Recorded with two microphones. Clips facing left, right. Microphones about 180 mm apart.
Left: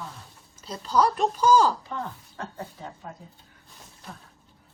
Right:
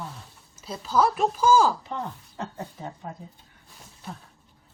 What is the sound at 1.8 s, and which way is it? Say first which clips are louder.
Speech: right 1 dB; 20° right (ahead or behind).